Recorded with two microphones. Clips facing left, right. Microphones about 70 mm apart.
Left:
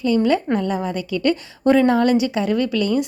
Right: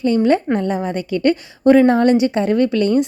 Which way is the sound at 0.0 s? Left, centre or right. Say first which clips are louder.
Right 3 dB; right.